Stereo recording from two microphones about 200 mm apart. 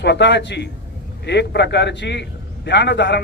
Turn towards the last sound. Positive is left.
turn(degrees=60)  # may be behind; listen again after turning